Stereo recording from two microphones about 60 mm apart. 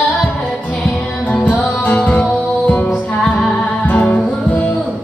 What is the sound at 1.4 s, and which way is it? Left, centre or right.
Music, left.